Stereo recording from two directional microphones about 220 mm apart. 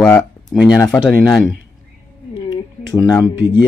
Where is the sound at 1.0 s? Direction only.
5° right (ahead or behind).